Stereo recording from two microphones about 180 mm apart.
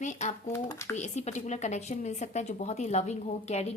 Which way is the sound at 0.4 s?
15° left (ahead or behind).